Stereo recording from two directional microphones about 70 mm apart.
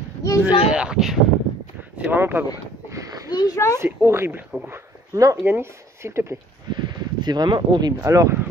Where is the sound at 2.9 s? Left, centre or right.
Right.